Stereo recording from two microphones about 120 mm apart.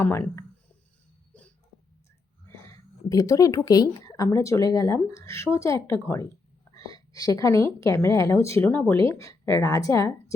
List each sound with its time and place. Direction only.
0.0 s speech: 20° left (ahead or behind)
1.3 s hiccup: 10° left (ahead or behind)
2.6 s a woman's voice: 30° left (ahead or behind)